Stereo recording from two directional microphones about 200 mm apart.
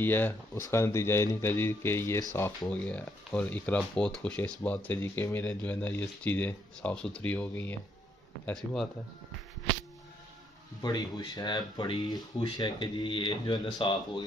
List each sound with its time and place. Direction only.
0.0 s speech: 10° left (ahead or behind)
10.8 s speech: 20° left (ahead or behind)